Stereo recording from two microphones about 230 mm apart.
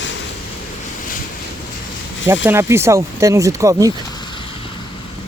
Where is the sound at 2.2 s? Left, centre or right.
Centre.